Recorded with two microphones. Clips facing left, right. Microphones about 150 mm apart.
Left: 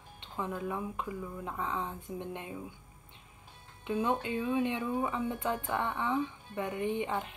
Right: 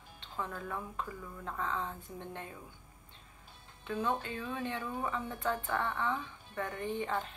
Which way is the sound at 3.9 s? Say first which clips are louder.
Left 4 dB; 20° left (ahead or behind).